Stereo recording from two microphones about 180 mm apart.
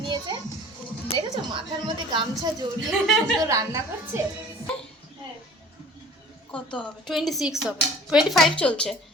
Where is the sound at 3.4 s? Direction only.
20° right (ahead or behind).